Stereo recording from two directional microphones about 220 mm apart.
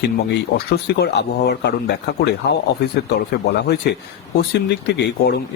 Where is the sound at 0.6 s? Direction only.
50° left (ahead or behind).